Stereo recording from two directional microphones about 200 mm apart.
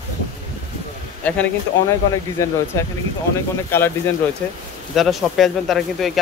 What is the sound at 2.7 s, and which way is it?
Speech, 15° left (ahead or behind).